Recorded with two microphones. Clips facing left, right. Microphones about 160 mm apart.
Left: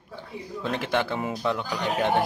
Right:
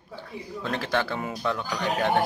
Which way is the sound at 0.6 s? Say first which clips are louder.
Left 1 dB; 20° left (ahead or behind).